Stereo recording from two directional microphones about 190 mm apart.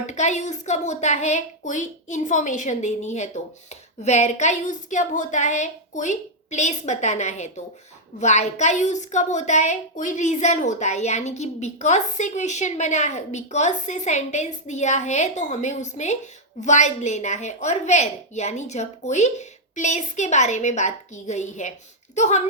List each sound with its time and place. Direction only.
0.0 s a woman's voice: 40° left (ahead or behind)